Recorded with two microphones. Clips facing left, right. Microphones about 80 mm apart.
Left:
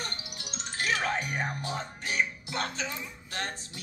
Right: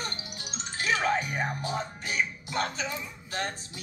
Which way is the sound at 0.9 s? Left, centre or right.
Right.